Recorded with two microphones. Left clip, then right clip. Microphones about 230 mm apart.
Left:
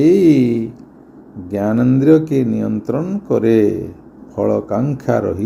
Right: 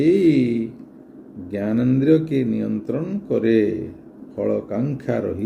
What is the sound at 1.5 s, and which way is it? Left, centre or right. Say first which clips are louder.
Speech: left 6 dB; left.